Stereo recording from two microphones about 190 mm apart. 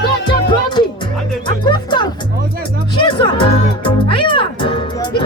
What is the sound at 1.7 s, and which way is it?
Music, 25° left (ahead or behind).